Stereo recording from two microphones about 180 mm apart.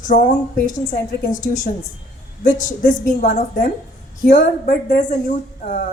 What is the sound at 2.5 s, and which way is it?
A woman's voice, 45° left (ahead or behind).